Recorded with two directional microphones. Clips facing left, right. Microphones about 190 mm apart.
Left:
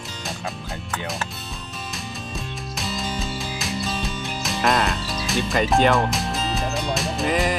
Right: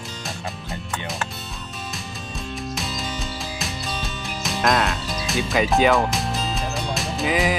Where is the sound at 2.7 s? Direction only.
Centre (ahead or behind).